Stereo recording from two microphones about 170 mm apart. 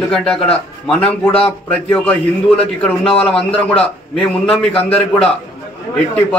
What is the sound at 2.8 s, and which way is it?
Speech, 5° left (ahead or behind).